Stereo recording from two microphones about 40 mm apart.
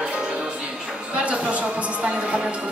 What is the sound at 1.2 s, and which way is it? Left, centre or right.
Music, right.